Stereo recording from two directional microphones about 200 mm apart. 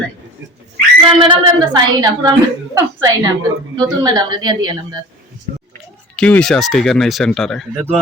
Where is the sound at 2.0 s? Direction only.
20° right (ahead or behind).